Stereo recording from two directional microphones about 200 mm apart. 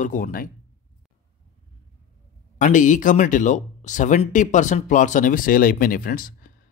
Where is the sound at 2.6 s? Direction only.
40° left (ahead or behind).